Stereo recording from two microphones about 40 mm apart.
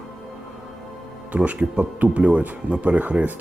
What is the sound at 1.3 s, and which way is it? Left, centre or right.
Speech, right.